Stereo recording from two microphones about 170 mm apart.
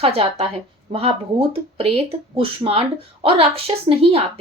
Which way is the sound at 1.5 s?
35° right (ahead or behind).